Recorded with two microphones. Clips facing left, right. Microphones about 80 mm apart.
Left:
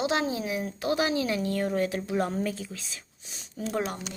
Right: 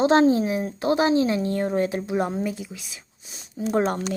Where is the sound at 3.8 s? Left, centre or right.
Right.